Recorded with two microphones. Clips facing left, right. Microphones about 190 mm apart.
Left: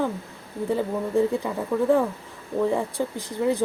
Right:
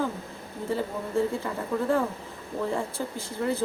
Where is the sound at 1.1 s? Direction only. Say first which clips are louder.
Left 4 dB; 15° left (ahead or behind).